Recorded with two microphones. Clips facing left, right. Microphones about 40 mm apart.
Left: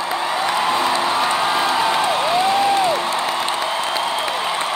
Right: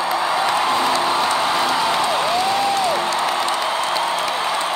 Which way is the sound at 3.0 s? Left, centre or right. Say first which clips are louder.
Right 1 dB; left.